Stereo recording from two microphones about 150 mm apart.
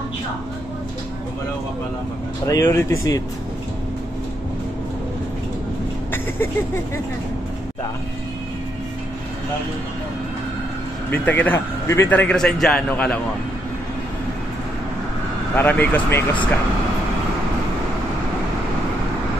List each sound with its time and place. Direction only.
2.4 s speech: 20° left (ahead or behind)
6.1 s speech: 15° left (ahead or behind)
11.1 s a man's voice: 10° left (ahead or behind)
15.5 s a man's voice: 10° left (ahead or behind)